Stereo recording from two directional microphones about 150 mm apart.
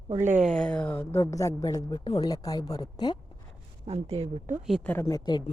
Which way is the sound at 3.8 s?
45° right (ahead or behind).